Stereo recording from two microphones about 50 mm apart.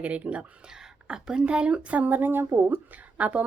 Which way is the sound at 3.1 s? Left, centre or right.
Right.